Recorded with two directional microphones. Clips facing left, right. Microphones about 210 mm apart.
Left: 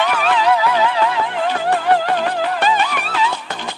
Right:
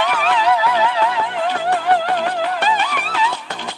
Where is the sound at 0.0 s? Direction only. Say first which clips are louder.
Left 1 dB; 50° left (ahead or behind).